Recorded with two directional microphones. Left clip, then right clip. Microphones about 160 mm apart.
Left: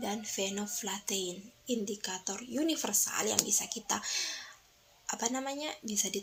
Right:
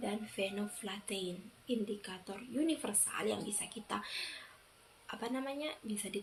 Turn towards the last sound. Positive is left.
turn(degrees=45)  # may be behind; listen again after turning